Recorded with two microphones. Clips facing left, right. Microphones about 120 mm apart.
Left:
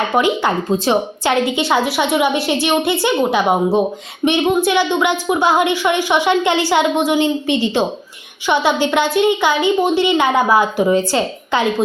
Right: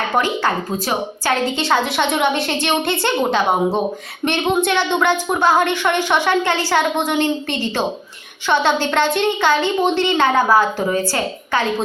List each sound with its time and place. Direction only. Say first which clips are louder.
0.2 s a woman's voice: left 3 dB; 15° left (ahead or behind)